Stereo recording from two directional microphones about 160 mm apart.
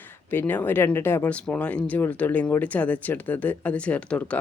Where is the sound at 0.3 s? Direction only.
15° left (ahead or behind).